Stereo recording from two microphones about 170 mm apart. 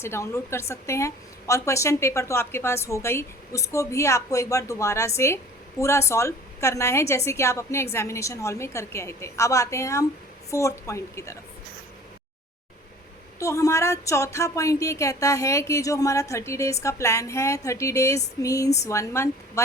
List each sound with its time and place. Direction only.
0.0 s a woman's voice: 15° left (ahead or behind)
13.4 s a woman's voice: 20° left (ahead or behind)